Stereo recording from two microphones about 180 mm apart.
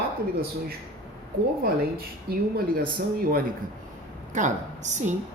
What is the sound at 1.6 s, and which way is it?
Speech, 55° right (ahead or behind).